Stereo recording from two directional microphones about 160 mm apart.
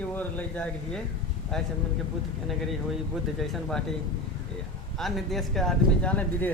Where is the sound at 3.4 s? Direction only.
Centre (ahead or behind).